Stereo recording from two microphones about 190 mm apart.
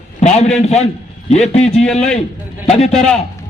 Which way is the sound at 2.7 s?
30° left (ahead or behind).